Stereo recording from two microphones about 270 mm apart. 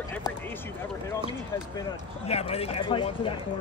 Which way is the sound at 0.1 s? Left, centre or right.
Centre.